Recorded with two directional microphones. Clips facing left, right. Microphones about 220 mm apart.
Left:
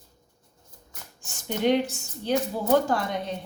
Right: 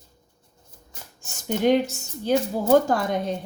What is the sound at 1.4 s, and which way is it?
A woman's voice, 45° right (ahead or behind).